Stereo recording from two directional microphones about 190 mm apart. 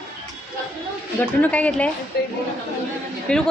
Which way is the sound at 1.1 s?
10° left (ahead or behind).